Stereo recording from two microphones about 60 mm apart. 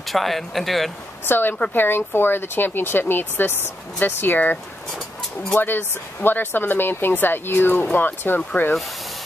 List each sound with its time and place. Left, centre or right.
0.0 s speech: centre
1.2 s speech: left
5.6 s speech: left